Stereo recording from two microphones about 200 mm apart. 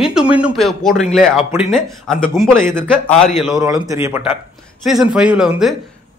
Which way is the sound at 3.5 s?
15° right (ahead or behind).